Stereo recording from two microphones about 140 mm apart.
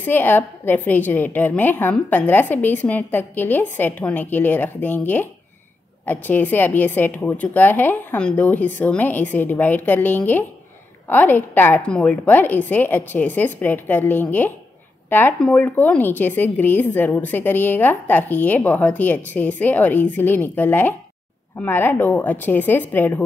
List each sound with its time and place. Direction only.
0.0 s a woman's voice: 15° left (ahead or behind)